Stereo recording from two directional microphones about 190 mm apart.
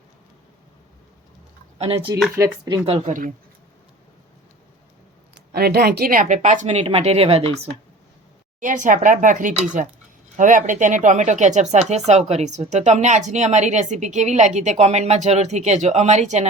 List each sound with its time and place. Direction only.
1.8 s speech: 30° right (ahead or behind)
2.4 s speech: 20° right (ahead or behind)
2.8 s speech: 35° right (ahead or behind)
5.5 s speech: 55° right (ahead or behind); by 7.7 s 30° right (ahead or behind)
8.6 s speech: 40° right (ahead or behind)